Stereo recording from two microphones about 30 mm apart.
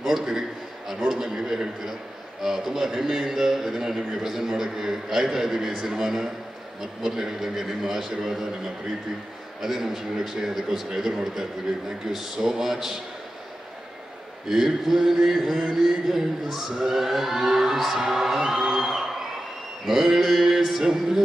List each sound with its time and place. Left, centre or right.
0.3 s a sound: centre
2.4 s speech: centre
9.6 s speech: centre
14.5 s speech: centre
20.2 s a sound: centre
20.8 s speech: centre